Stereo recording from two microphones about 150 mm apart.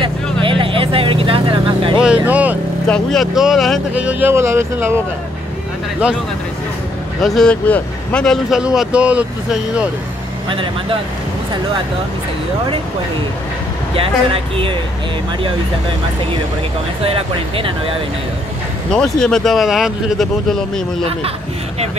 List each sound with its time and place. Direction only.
0.0 s vehicle: 35° right (ahead or behind)
2.2 s vehicle: 10° right (ahead or behind)
2.9 s speech: 5° left (ahead or behind); by 5.0 s 15° right (ahead or behind)
7.2 s speech: centre (ahead or behind)
10.5 s speech: 35° right (ahead or behind)
13.9 s speech: 35° right (ahead or behind)
17.0 s speech: 40° right (ahead or behind)
18.9 s speech: 5° left (ahead or behind)